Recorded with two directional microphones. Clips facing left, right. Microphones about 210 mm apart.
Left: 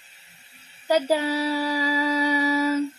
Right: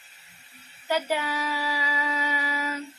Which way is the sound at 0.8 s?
40° left (ahead or behind).